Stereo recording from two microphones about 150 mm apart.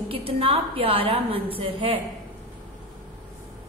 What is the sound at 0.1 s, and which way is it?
A woman's voice, 40° right (ahead or behind).